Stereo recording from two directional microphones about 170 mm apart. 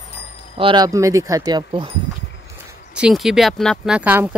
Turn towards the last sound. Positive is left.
turn(degrees=-10)  # may be behind; listen again after turning